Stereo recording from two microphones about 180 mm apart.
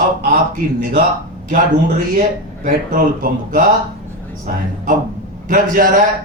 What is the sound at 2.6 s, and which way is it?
Speech, 50° right (ahead or behind).